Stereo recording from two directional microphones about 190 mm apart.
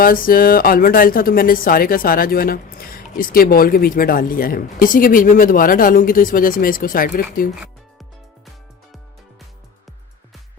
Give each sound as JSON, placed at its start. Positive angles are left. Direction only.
{"t": 0.0, "sound": "speech", "side_deg": 50}